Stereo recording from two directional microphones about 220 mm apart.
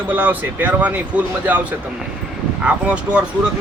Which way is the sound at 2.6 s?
5° right (ahead or behind).